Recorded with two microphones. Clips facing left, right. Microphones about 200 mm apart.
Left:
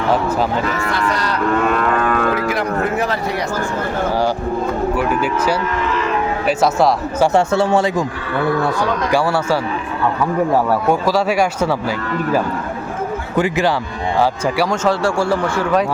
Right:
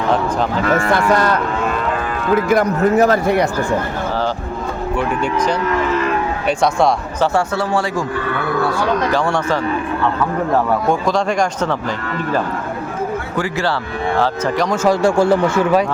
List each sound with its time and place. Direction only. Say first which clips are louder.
0.7 s speech: right 5 dB; 50° right (ahead or behind)
1.8 s moo: left 4 dB; 60° left (ahead or behind)
2.3 s speech: right 4 dB; 45° right (ahead or behind)
4.9 s speech: left 1 dB; 5° left (ahead or behind)
6.6 s speech: even; 5° left (ahead or behind)
7.3 s speech: left 3 dB; 25° left (ahead or behind)
9.1 s speech: left 1 dB; 10° left (ahead or behind)
13.3 s speech: left 6 dB; 20° left (ahead or behind)
14.8 s speech: right 6 dB; 20° right (ahead or behind)